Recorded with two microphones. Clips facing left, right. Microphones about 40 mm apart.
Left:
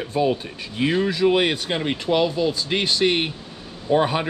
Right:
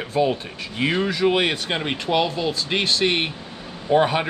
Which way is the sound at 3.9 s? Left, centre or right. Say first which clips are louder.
Right 1 dB; centre.